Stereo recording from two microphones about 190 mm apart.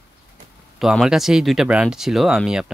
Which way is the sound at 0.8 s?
Centre (ahead or behind).